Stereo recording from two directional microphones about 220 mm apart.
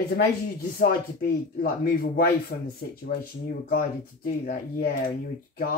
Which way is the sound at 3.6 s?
40° left (ahead or behind).